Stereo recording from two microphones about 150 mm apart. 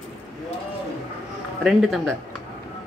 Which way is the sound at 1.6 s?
Centre (ahead or behind).